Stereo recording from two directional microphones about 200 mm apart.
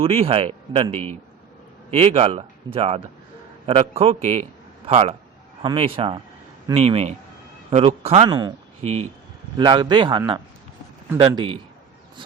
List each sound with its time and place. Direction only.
0.0 s speech: 30° right (ahead or behind)
1.9 s a man's voice: 30° right (ahead or behind)
8.8 s a man's voice: 35° right (ahead or behind)
9.6 s speech: 20° right (ahead or behind)